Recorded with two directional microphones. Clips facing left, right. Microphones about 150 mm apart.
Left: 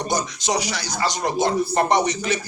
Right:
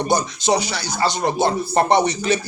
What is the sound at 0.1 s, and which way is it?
Speech, 30° right (ahead or behind).